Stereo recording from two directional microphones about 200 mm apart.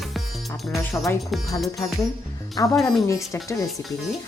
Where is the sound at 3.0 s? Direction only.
15° left (ahead or behind).